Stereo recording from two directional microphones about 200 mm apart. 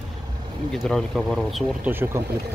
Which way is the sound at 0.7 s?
Centre (ahead or behind).